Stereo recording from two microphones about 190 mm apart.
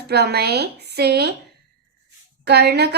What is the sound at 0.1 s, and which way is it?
Speech, 60° right (ahead or behind).